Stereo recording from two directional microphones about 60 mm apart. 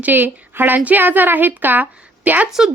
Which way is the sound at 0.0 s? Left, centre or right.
Right.